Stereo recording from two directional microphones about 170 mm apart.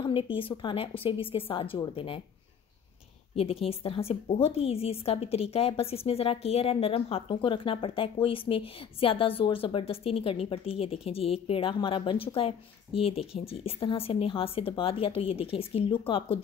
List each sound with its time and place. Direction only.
0.0 s a woman's voice: 30° left (ahead or behind)
3.3 s a woman's voice: 35° left (ahead or behind)